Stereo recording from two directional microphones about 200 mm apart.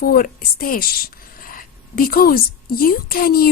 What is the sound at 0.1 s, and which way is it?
A woman's voice, 45° left (ahead or behind).